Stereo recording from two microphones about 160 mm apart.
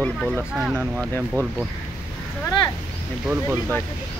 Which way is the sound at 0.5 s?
5° right (ahead or behind).